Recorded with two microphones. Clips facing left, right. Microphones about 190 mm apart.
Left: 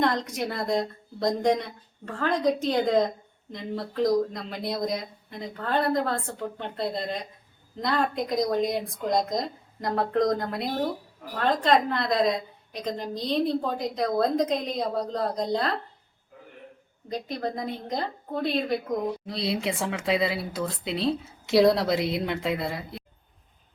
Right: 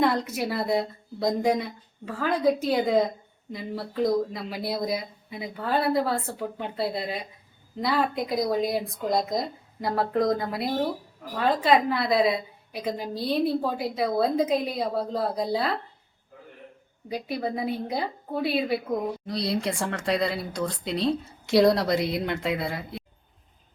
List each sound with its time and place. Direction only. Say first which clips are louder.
0.0 s a woman's voice: right 2 dB; 5° right (ahead or behind)
17.1 s a woman's voice: right 1 dB; 10° right (ahead or behind)